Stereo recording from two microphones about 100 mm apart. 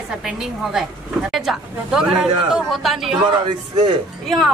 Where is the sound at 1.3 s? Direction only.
5° right (ahead or behind).